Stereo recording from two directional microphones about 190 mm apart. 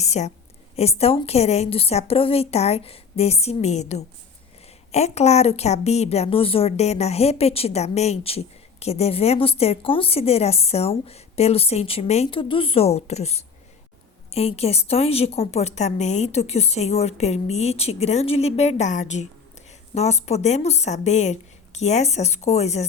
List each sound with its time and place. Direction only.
0.0 s a woman's voice: 35° left (ahead or behind)